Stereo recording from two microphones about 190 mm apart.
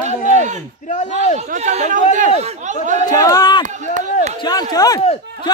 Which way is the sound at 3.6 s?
40° right (ahead or behind).